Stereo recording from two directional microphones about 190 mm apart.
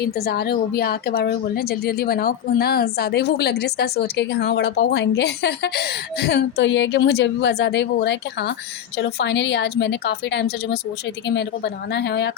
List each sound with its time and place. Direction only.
0.0 s a woman's voice: 55° left (ahead or behind)